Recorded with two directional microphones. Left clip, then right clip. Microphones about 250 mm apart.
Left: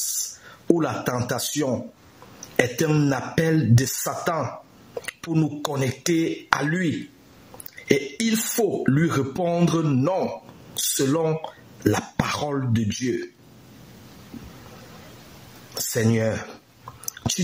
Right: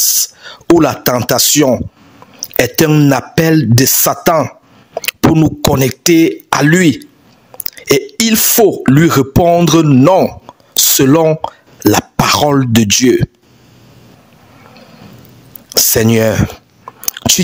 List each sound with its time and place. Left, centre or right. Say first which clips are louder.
0.4 s speech: right 12 dB; right
15.7 s speech: right 13 dB; right
17.0 s biting: right 13 dB; right